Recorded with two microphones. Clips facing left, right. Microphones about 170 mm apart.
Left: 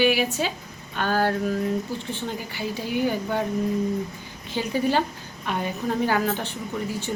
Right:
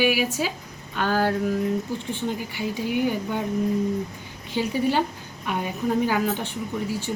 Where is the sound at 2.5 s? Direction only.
10° right (ahead or behind).